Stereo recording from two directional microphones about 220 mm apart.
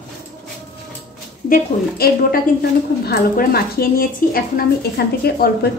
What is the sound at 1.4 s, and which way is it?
A woman's voice, 40° left (ahead or behind).